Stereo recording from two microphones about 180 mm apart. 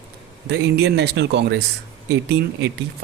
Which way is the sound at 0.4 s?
70° right (ahead or behind).